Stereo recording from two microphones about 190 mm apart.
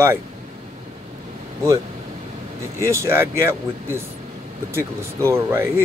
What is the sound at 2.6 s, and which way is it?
Speech, 15° right (ahead or behind).